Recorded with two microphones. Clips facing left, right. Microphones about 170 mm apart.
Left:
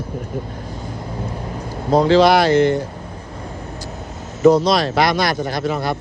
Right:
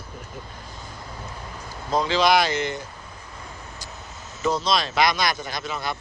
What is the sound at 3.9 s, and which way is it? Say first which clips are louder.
Vehicle: left 9 dB; 55° left (ahead or behind).